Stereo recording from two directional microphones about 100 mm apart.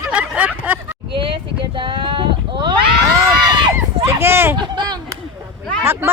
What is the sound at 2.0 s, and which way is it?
Sheep, 55° right (ahead or behind).